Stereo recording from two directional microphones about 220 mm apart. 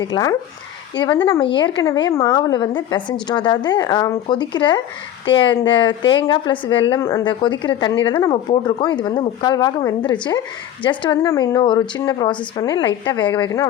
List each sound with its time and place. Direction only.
0.0 s speech: 15° left (ahead or behind)